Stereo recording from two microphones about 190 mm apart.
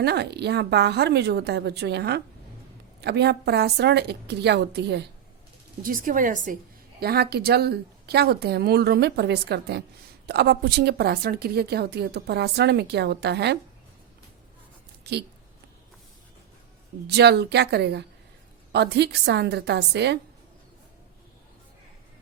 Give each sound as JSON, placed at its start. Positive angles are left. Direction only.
{"t": 0.0, "sound": "a woman's voice", "side_deg": -60}
{"t": 5.8, "sound": "a woman's voice", "side_deg": -45}
{"t": 7.0, "sound": "a woman's voice", "side_deg": -55}
{"t": 15.1, "sound": "speech", "side_deg": -60}
{"t": 17.1, "sound": "a woman's voice", "side_deg": -60}